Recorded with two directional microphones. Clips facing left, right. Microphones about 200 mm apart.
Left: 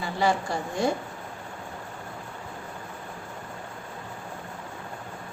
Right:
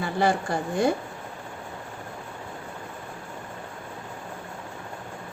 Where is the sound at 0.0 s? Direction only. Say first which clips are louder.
Right 2 dB; 55° right (ahead or behind).